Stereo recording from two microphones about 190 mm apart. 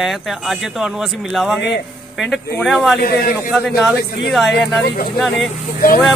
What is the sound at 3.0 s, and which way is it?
Speech, 50° left (ahead or behind).